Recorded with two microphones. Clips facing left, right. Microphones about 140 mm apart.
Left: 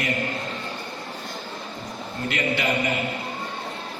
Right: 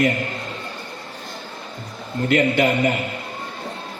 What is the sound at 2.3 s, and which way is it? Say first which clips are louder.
Speech: right 8 dB; 50° right (ahead or behind).